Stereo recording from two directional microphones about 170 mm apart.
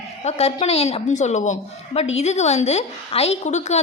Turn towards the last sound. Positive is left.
turn(degrees=40)  # may be behind; listen again after turning